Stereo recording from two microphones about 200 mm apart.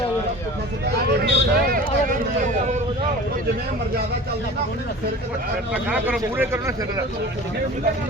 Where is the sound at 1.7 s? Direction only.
45° right (ahead or behind).